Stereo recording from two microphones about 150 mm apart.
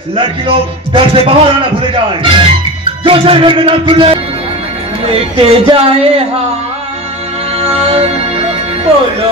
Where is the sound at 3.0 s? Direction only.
40° right (ahead or behind).